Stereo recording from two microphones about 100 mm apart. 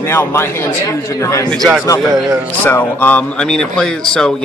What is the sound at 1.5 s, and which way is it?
Speech, centre (ahead or behind).